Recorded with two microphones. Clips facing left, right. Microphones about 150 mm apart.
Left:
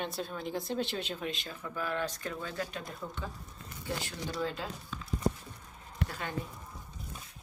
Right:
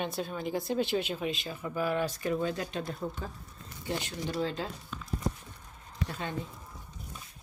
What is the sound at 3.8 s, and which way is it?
Speech, 20° right (ahead or behind).